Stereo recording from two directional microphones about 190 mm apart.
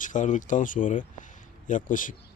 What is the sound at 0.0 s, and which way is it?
Speech, 40° left (ahead or behind).